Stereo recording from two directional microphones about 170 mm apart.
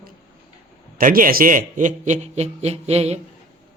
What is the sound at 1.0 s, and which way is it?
A man's voice, 55° right (ahead or behind).